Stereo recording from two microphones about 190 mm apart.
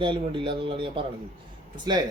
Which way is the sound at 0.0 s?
25° right (ahead or behind).